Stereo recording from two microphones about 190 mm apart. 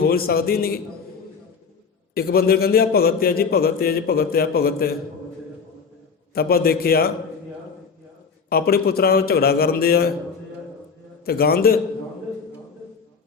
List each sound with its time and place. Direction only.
0.1 s a man's voice: 55° left (ahead or behind)
2.1 s a man's voice: 55° left (ahead or behind)
6.3 s a man's voice: 55° left (ahead or behind)
8.4 s a man's voice: 55° left (ahead or behind)
11.3 s a man's voice: 55° left (ahead or behind)